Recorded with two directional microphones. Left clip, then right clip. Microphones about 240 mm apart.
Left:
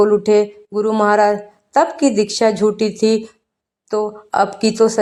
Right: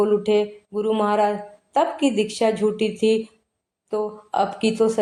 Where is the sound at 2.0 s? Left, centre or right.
Left.